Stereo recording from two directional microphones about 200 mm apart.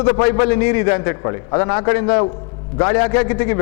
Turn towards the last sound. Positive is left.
turn(degrees=10)  # may be behind; listen again after turning